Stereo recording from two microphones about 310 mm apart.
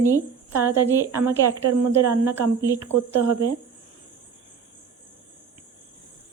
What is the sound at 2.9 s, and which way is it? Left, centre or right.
Speech, right.